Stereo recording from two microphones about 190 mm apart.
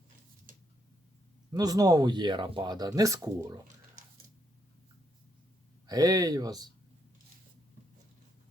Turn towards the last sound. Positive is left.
turn(degrees=-20)  # may be behind; listen again after turning